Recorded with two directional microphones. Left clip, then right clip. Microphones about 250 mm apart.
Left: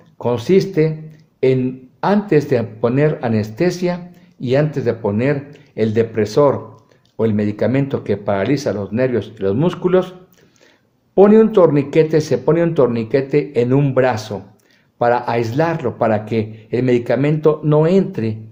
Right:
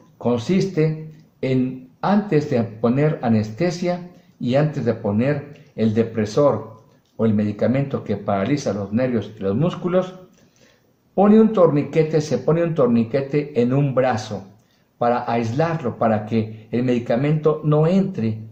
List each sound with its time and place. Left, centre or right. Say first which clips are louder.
0.2 s speech: left 6 dB; left
2.0 s speech: left 4 dB; left
11.1 s speech: left 5 dB; left